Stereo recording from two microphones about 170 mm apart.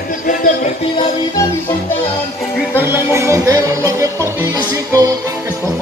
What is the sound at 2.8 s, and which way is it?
Music, 15° right (ahead or behind).